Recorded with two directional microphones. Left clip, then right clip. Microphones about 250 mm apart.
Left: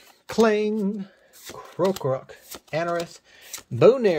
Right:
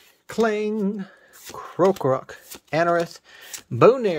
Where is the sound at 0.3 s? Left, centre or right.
Centre.